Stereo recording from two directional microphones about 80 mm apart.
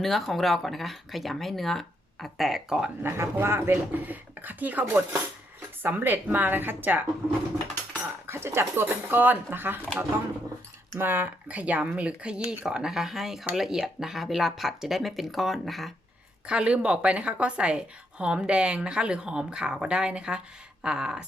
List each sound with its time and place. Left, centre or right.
0.0 s speech: centre
3.0 s speech: right
8.3 s speech: right
10.9 s a woman's voice: right; by 15.9 s centre
16.5 s a woman's voice: centre